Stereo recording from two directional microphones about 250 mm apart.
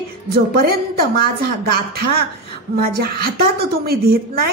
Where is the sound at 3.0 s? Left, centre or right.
Right.